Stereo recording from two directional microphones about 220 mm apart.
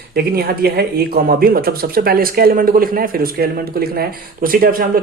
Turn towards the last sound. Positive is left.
turn(degrees=-40)  # may be behind; listen again after turning